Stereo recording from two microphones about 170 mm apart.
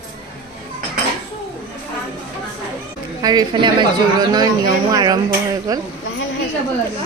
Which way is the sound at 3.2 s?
25° right (ahead or behind).